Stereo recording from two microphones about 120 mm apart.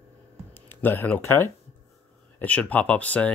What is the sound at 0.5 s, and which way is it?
Speech, 20° left (ahead or behind).